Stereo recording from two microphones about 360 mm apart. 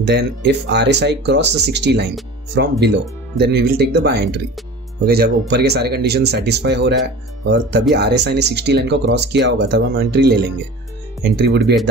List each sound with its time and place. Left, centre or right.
0.0 s speech: right